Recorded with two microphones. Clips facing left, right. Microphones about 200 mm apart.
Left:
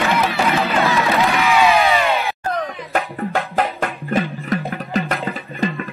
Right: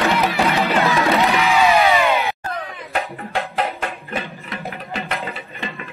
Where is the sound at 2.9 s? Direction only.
45° left (ahead or behind).